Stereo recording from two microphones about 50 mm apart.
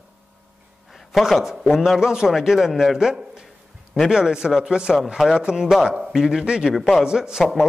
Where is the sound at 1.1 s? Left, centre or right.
Centre.